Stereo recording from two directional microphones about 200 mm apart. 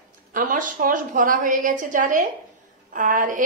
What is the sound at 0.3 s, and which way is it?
Speech, 40° right (ahead or behind).